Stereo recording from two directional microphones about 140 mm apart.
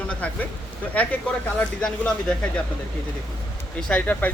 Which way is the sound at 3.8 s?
5° left (ahead or behind).